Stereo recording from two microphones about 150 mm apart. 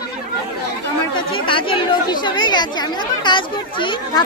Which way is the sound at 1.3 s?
35° left (ahead or behind).